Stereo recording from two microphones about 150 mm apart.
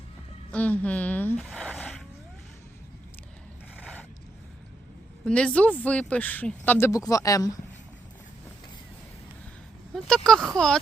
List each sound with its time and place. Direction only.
0.5 s speech: 10° left (ahead or behind)
1.4 s zipper: centre (ahead or behind)
5.2 s speech: 10° left (ahead or behind); by 7.6 s 25° left (ahead or behind)
9.9 s speech: 5° left (ahead or behind)